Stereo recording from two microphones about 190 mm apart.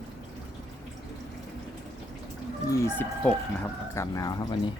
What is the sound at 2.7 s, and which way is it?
Speech, 10° left (ahead or behind).